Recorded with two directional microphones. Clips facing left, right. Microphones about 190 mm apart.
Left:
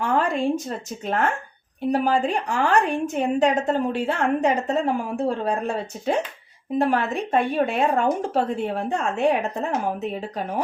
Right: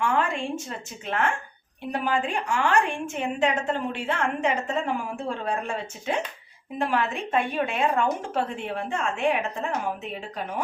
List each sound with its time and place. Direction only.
0.0 s a woman's voice: 35° left (ahead or behind)